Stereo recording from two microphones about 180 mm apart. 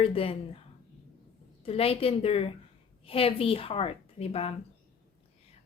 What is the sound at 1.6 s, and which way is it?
Speech, 35° left (ahead or behind).